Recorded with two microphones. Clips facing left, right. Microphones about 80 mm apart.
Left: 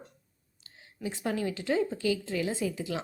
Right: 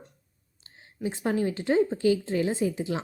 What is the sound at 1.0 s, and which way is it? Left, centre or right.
A woman's voice, right.